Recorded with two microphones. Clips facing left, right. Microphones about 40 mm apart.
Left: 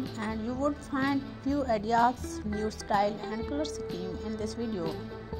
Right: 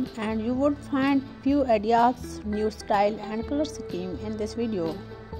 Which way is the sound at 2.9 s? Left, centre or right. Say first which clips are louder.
Right 4 dB; right.